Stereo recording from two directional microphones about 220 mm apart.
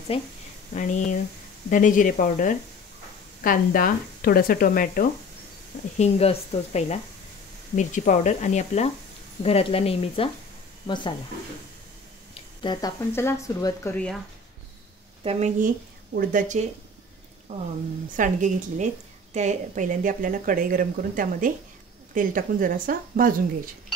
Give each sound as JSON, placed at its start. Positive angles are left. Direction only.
{"t": 0.7, "sound": "speech", "side_deg": 35}
{"t": 5.9, "sound": "speech", "side_deg": 30}
{"t": 12.6, "sound": "speech", "side_deg": 15}
{"t": 13.9, "sound": "speech", "side_deg": 5}
{"t": 15.2, "sound": "speech", "side_deg": -30}